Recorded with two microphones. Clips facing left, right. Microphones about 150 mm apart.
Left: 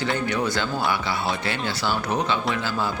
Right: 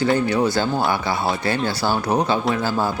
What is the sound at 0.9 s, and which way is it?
Speech, 40° right (ahead or behind).